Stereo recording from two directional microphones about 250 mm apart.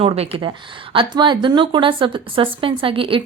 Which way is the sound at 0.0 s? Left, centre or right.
Right.